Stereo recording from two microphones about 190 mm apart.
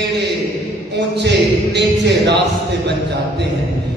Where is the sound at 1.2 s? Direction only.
65° right (ahead or behind).